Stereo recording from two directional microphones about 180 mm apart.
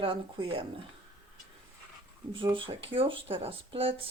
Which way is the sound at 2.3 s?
30° right (ahead or behind).